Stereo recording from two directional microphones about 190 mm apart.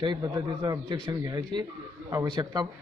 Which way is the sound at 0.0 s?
25° right (ahead or behind).